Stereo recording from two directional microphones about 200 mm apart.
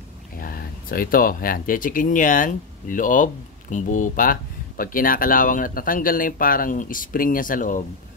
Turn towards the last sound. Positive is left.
turn(degrees=40)  # may be behind; listen again after turning